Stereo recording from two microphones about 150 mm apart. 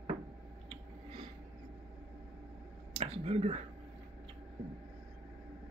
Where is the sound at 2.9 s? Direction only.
40° right (ahead or behind).